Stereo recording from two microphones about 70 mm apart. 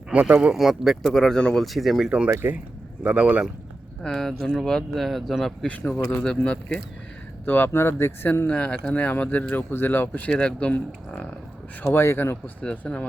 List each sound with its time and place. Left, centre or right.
0.1 s speech: right
0.3 s speech: centre
1.6 s speech: centre
2.0 s speech: centre
2.3 s speech: right
3.0 s speech: centre
4.0 s speech: centre
7.4 s speech: left
11.9 s speech: left
12.6 s speech: centre